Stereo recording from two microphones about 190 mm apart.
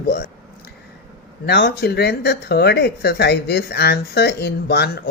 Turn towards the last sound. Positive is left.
turn(degrees=60)  # may be behind; listen again after turning